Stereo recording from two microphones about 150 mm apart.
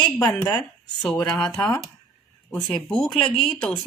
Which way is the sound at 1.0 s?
10° left (ahead or behind).